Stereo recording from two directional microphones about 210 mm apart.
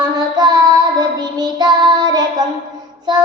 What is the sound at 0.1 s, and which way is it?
Child singing, 20° right (ahead or behind).